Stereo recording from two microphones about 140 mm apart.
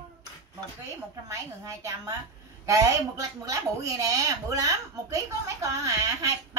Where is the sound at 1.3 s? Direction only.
20° right (ahead or behind).